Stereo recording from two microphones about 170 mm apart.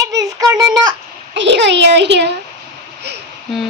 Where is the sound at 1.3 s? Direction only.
90° right.